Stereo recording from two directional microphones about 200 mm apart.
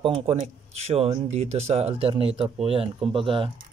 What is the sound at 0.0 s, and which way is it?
A man's voice, 30° right (ahead or behind).